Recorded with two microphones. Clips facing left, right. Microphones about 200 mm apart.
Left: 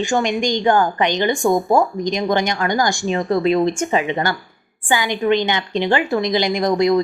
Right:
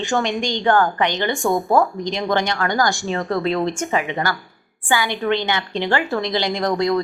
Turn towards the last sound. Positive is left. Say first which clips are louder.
# left 3 dB
turn(degrees=15)  # may be behind; listen again after turning